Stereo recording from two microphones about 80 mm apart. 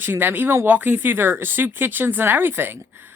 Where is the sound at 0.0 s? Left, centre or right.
Right.